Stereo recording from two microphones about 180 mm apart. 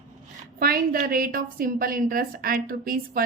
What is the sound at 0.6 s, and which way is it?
A woman's voice, 55° right (ahead or behind).